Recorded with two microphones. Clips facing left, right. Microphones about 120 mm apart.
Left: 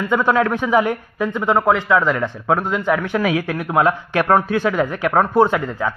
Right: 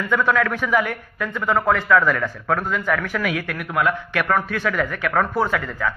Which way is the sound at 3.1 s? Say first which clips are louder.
Left 5 dB; 30° left (ahead or behind).